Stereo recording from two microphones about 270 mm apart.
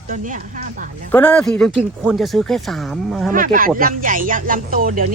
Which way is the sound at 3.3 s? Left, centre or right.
Right.